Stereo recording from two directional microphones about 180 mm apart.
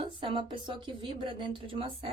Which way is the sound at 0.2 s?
30° right (ahead or behind).